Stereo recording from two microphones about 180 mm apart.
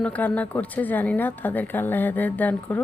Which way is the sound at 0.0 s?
10° left (ahead or behind).